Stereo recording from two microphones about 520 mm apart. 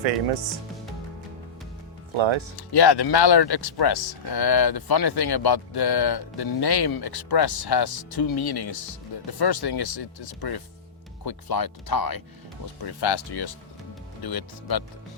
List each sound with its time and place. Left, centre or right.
2.1 s speech: right
2.6 s speech: left
9.9 s speech: left